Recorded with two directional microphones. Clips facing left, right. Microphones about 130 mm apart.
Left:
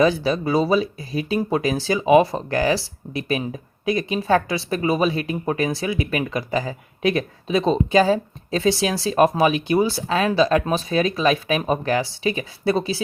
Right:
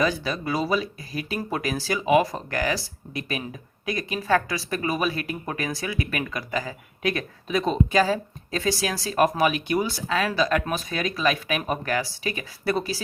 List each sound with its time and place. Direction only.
0.0 s speech: 25° left (ahead or behind)